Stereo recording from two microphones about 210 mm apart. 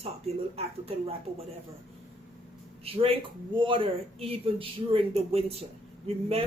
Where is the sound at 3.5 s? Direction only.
25° right (ahead or behind).